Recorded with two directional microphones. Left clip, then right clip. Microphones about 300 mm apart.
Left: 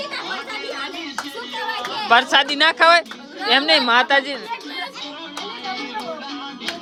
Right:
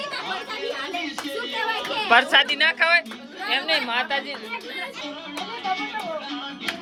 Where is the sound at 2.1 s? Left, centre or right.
Centre; by 4.3 s left.